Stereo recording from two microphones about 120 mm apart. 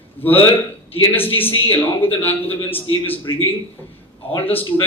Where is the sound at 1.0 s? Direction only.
15° left (ahead or behind).